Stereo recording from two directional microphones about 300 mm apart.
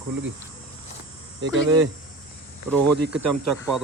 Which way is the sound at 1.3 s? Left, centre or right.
Right.